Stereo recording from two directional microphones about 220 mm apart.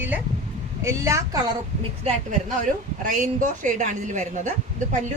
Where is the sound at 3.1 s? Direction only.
35° right (ahead or behind).